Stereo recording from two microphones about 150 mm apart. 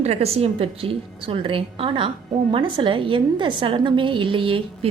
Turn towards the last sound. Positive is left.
turn(degrees=-35)  # may be behind; listen again after turning